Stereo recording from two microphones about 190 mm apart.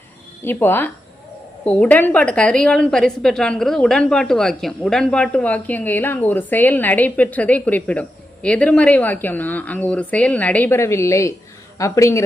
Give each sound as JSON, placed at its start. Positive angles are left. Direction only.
{"t": 0.4, "sound": "a woman's voice", "side_deg": 10}